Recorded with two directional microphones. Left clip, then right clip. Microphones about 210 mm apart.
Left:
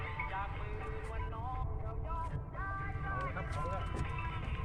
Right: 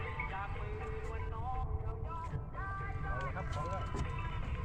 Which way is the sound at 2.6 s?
55° left (ahead or behind).